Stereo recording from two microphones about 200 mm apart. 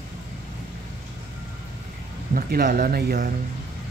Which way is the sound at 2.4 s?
45° right (ahead or behind).